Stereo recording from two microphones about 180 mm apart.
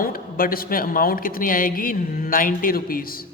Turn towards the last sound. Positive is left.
turn(degrees=55)  # may be behind; listen again after turning